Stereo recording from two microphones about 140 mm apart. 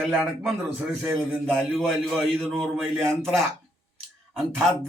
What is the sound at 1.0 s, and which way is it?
Speech, 20° right (ahead or behind).